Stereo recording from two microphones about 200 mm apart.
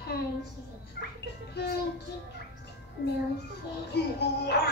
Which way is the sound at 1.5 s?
55° left (ahead or behind).